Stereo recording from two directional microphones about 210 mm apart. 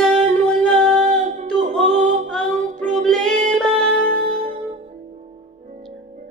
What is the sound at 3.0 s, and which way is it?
Music, 5° left (ahead or behind).